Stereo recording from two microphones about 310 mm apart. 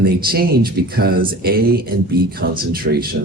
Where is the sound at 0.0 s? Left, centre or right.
Right.